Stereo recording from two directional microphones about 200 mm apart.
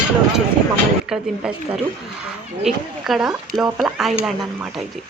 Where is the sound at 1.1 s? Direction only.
5° right (ahead or behind).